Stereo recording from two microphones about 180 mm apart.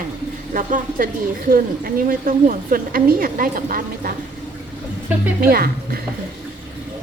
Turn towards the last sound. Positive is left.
turn(degrees=-55)  # may be behind; listen again after turning